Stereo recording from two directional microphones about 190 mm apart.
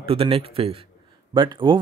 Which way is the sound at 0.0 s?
30° right (ahead or behind).